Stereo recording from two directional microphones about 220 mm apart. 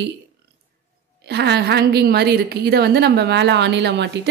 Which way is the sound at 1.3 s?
50° right (ahead or behind).